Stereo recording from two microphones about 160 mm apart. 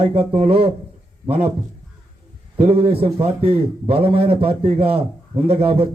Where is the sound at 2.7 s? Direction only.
35° right (ahead or behind).